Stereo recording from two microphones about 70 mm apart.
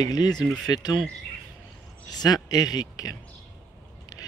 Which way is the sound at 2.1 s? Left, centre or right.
Left.